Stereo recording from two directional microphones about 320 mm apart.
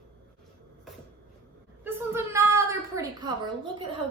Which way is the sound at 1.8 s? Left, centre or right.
Centre.